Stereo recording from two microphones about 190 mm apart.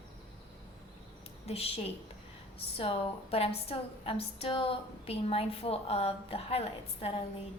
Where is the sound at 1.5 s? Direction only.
30° left (ahead or behind).